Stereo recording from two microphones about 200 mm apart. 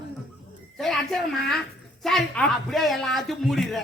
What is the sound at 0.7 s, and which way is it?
A man's voice, centre (ahead or behind).